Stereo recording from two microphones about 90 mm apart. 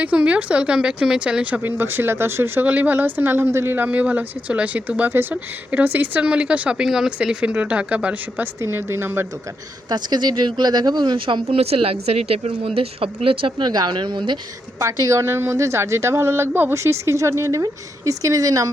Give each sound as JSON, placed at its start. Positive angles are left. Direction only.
{"t": 0.0, "sound": "speech", "side_deg": -15}
{"t": 1.6, "sound": "speech", "side_deg": -25}
{"t": 8.6, "sound": "speech", "side_deg": -30}
{"t": 9.9, "sound": "speech", "side_deg": -50}
{"t": 13.7, "sound": "speech", "side_deg": -55}
{"t": 14.8, "sound": "speech", "side_deg": -40}